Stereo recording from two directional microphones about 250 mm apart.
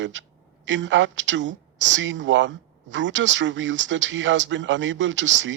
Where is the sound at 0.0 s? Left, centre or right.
Right.